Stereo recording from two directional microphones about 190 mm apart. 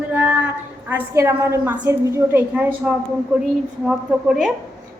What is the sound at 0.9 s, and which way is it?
A woman's voice, 15° right (ahead or behind).